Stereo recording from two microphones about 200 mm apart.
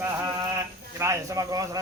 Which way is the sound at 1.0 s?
15° right (ahead or behind).